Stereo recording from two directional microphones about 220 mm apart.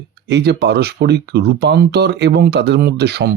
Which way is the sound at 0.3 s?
50° right (ahead or behind).